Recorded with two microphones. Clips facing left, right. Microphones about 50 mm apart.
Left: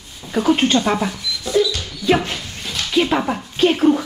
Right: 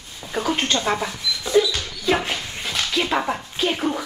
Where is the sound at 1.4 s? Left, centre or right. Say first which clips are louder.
Left 1 dB; centre.